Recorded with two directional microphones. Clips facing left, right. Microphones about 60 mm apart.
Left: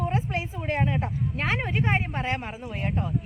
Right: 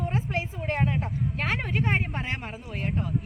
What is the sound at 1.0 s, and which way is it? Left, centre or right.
Speech, centre.